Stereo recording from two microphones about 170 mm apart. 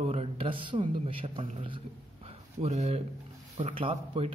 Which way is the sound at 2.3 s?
40° right (ahead or behind).